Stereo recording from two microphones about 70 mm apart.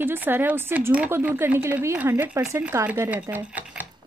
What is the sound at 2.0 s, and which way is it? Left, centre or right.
Speech, right.